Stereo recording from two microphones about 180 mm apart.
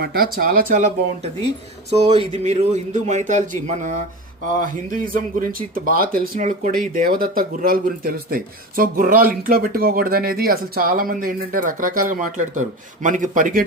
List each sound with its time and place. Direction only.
0.0 s a man's voice: 55° right (ahead or behind)